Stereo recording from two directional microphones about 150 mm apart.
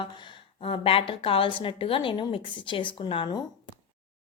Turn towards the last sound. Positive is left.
turn(degrees=30)  # may be behind; listen again after turning